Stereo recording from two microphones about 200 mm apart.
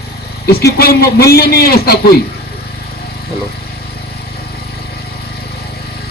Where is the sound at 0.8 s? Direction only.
50° left (ahead or behind).